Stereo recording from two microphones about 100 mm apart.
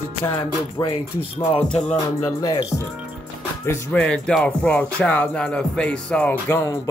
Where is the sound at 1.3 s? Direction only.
65° left (ahead or behind).